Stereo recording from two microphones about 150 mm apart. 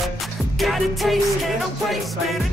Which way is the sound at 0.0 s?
Centre (ahead or behind).